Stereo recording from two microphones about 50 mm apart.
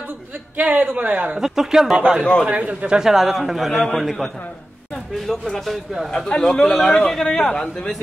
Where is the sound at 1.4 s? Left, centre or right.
Centre.